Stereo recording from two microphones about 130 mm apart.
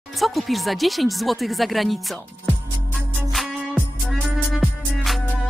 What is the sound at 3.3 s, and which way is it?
Music, centre (ahead or behind).